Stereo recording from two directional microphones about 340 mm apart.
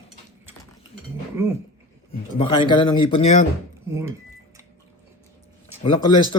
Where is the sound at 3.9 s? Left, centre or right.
Centre.